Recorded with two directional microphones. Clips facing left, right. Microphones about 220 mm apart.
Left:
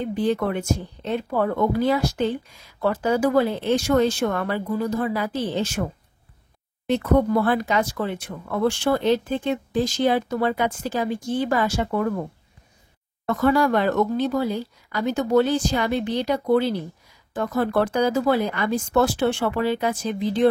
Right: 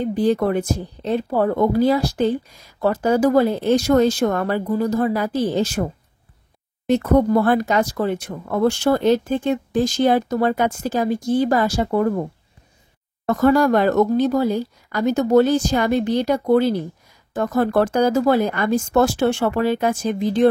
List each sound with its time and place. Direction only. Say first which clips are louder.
0.0 s speech: right 4 dB; 35° right (ahead or behind)
6.9 s speech: right 3 dB; 45° right (ahead or behind)